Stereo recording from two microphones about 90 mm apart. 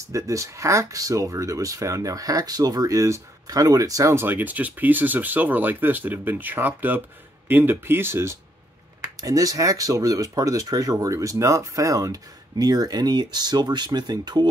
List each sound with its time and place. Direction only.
0.1 s speech: 35° right (ahead or behind)
9.2 s speech: 40° right (ahead or behind)